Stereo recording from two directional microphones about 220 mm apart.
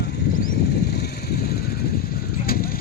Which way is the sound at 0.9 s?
45° left (ahead or behind).